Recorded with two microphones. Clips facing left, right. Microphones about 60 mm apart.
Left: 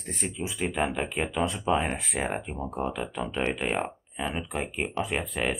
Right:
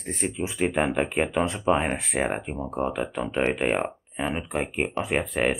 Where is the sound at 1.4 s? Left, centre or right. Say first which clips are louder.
Right 3 dB; centre.